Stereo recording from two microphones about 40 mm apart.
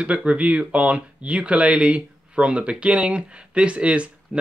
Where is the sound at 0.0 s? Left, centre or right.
Right.